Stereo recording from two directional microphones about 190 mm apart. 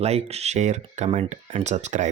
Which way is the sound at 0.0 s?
35° right (ahead or behind).